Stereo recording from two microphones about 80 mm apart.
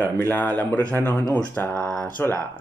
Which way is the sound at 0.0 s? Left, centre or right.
Left.